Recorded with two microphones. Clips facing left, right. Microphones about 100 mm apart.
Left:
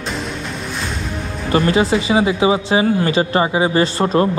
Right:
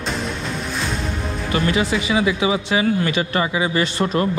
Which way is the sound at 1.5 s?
30° left (ahead or behind).